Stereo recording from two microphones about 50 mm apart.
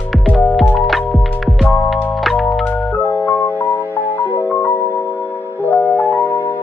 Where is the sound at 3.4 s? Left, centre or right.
Left.